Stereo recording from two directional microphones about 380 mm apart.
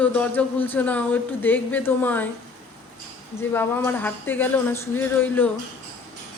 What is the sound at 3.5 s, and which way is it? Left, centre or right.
Speech, centre.